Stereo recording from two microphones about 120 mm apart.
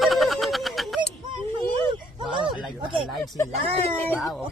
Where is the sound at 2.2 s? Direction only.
40° right (ahead or behind).